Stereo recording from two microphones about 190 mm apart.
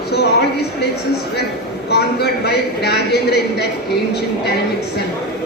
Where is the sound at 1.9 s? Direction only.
60° left (ahead or behind).